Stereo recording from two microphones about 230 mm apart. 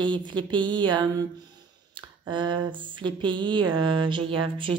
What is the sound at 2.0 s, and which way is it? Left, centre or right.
A woman's voice, right.